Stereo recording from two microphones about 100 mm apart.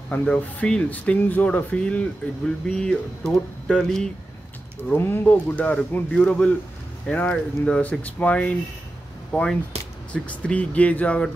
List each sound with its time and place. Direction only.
0.1 s speech: 15° left (ahead or behind)
4.8 s speech: 20° left (ahead or behind)